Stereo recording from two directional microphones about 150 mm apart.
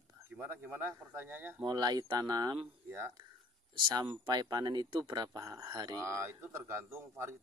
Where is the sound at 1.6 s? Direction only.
25° right (ahead or behind).